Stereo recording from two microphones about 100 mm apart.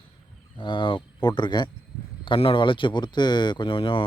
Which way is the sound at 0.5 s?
55° left (ahead or behind).